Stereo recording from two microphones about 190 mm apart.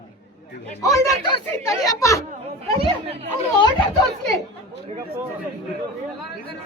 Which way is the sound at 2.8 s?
30° right (ahead or behind).